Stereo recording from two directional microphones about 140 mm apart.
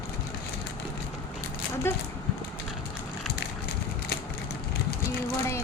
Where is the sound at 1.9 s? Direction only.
15° left (ahead or behind).